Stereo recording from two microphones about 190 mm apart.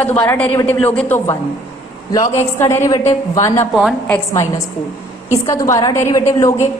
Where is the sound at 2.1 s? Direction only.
15° left (ahead or behind).